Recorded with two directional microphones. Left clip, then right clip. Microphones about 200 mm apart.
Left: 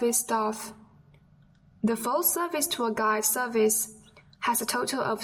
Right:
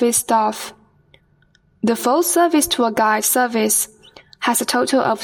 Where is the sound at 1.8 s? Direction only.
35° right (ahead or behind).